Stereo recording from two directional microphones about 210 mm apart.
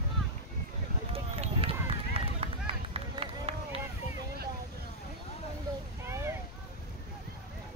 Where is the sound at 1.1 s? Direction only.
25° right (ahead or behind).